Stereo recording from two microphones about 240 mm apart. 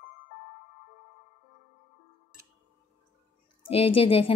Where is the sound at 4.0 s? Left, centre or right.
Left.